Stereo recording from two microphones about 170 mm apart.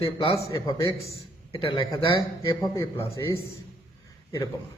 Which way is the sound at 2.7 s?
15° left (ahead or behind).